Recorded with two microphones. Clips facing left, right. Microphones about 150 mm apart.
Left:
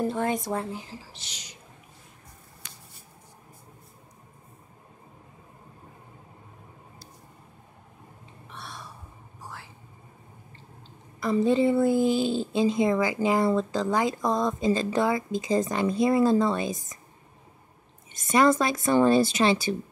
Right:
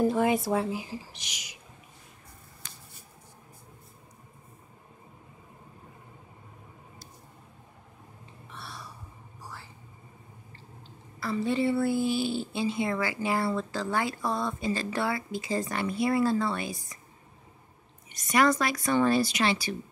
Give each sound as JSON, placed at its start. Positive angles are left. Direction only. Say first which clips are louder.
{"t": 0.0, "sound": "speech", "louder": "right 3 dB", "side_deg": -5}
{"t": 8.5, "sound": "a sound", "louder": "left 2 dB", "side_deg": -5}
{"t": 11.1, "sound": "a woman's voice", "louder": "left 6 dB", "side_deg": 20}
{"t": 18.1, "sound": "a woman's voice", "louder": "left 3 dB", "side_deg": 25}